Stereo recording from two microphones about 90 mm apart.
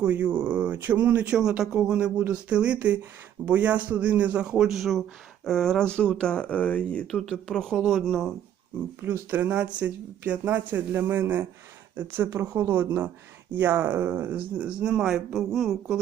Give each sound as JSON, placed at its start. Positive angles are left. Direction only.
{"t": 0.0, "sound": "speech", "side_deg": -20}
{"t": 9.0, "sound": "speech", "side_deg": -20}